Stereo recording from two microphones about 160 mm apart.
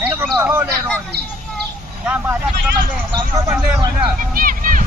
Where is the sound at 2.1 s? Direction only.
5° right (ahead or behind).